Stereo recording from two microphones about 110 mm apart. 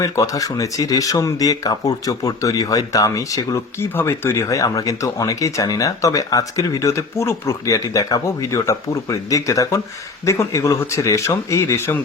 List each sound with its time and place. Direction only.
0.0 s speech: 30° left (ahead or behind)